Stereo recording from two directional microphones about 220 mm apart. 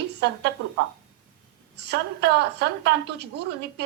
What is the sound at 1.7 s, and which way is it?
A woman's voice, 50° right (ahead or behind).